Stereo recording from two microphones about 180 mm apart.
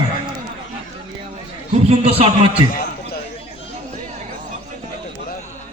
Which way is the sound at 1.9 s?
35° right (ahead or behind).